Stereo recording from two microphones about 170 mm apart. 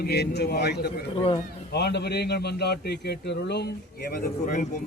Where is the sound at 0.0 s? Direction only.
75° left (ahead or behind).